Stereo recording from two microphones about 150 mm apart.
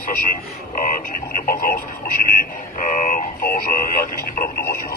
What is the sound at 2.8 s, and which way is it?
Speech, 60° left (ahead or behind).